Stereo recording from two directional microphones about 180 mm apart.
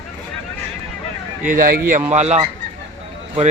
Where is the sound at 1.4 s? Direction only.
50° right (ahead or behind).